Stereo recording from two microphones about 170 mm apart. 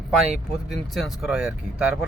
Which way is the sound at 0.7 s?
Centre (ahead or behind).